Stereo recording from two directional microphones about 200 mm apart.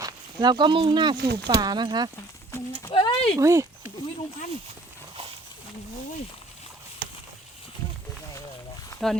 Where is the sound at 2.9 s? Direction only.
25° left (ahead or behind).